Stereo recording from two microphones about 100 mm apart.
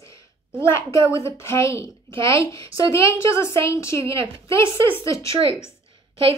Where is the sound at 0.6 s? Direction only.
25° left (ahead or behind).